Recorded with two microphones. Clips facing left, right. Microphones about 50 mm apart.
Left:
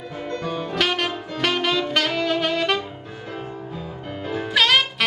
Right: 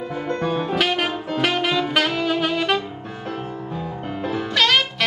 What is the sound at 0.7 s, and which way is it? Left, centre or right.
Music, centre.